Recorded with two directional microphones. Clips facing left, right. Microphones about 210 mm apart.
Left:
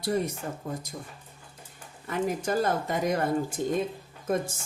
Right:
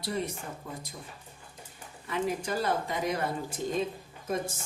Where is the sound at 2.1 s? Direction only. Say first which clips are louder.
Left 3 dB; 45° left (ahead or behind).